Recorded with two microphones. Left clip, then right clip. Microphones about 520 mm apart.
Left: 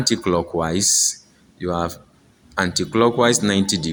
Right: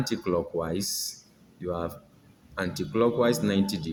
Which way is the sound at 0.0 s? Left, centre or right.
Right.